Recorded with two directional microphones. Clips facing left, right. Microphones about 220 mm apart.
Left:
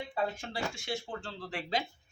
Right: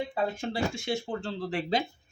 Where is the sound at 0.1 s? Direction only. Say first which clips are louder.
Right 4 dB; 25° right (ahead or behind).